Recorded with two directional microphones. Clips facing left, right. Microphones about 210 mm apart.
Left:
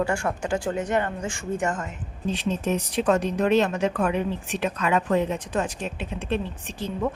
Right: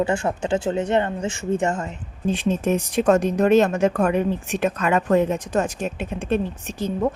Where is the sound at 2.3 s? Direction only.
50° right (ahead or behind).